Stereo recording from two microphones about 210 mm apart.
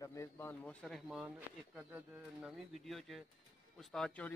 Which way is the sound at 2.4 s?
Centre (ahead or behind).